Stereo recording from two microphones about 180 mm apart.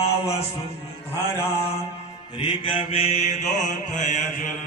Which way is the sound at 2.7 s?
35° left (ahead or behind).